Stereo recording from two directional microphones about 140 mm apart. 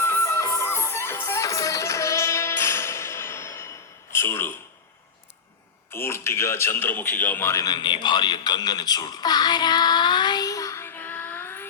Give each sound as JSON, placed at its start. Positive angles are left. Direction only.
{"t": 0.0, "sound": "music", "side_deg": 20}
{"t": 4.1, "sound": "a sound", "side_deg": 15}
{"t": 5.9, "sound": "a man's voice", "side_deg": 20}